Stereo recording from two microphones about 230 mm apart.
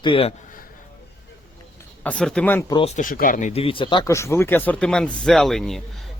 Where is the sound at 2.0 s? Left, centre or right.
Centre.